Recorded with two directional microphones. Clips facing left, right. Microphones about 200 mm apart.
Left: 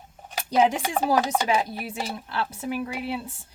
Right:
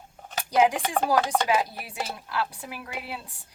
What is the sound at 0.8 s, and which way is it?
Chopping, 5° left (ahead or behind).